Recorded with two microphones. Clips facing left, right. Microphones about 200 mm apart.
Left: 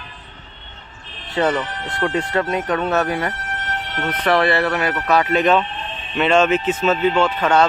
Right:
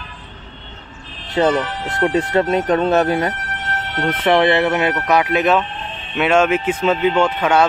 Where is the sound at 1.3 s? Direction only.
25° right (ahead or behind).